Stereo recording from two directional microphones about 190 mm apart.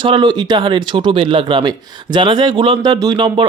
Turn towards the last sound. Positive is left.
turn(degrees=-25)  # may be behind; listen again after turning